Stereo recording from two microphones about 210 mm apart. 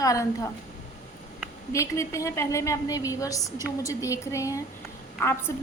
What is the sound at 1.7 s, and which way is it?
A woman's voice, 15° left (ahead or behind).